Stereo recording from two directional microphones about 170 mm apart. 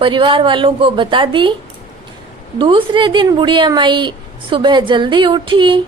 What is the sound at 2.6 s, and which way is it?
A woman's voice, 30° right (ahead or behind).